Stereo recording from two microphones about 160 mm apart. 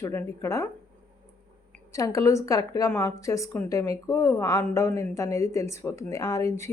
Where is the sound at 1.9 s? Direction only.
20° left (ahead or behind).